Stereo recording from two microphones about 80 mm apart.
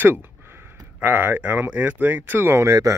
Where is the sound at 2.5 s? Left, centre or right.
Right.